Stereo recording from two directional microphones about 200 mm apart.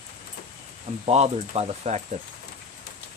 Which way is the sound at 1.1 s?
30° right (ahead or behind).